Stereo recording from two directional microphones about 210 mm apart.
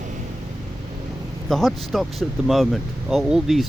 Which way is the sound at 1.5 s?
Centre (ahead or behind).